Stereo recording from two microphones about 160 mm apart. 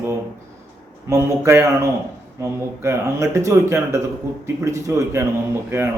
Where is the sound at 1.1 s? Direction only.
15° right (ahead or behind).